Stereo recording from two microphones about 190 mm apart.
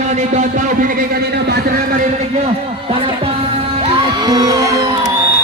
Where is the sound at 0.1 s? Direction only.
40° right (ahead or behind).